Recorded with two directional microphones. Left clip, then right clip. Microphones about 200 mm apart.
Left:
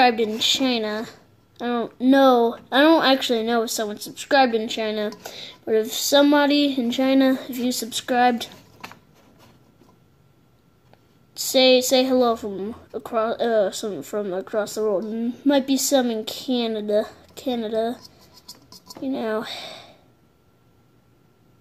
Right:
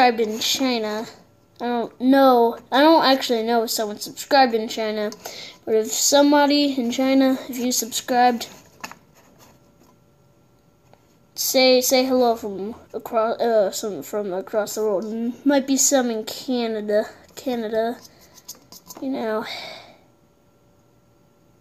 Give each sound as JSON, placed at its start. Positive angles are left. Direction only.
{"t": 0.0, "sound": "speech", "side_deg": 0}
{"t": 10.9, "sound": "speech", "side_deg": 0}
{"t": 18.0, "sound": "writing", "side_deg": -15}
{"t": 18.9, "sound": "speech", "side_deg": 0}